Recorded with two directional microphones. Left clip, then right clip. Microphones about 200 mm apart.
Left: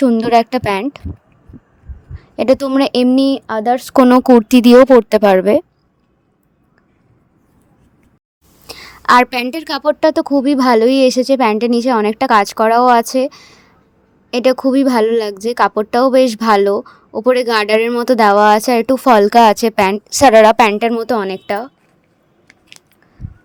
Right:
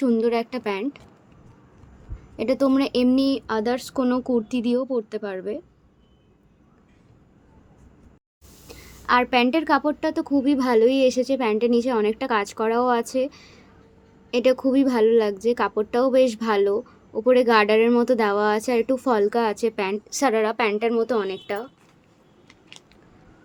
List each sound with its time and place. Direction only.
0.0 s a woman's voice: 45° left (ahead or behind)
2.1 s a woman's voice: 45° left (ahead or behind)
8.6 s a sound: 55° left (ahead or behind)
9.4 s a woman's voice: 50° left (ahead or behind)